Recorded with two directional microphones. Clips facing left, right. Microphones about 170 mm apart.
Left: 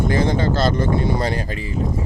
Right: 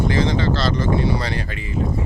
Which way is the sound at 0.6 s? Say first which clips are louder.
Left 1 dB; 50° left (ahead or behind).